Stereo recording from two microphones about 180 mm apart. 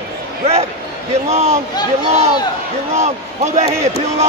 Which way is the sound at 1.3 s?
35° right (ahead or behind).